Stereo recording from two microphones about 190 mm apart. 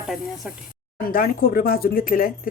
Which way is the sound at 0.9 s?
50° left (ahead or behind).